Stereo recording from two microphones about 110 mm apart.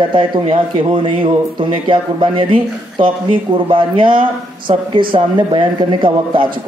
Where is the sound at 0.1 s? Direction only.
55° right (ahead or behind).